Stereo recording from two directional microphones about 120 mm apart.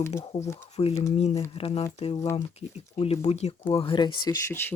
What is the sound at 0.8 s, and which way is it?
Speech, 45° left (ahead or behind).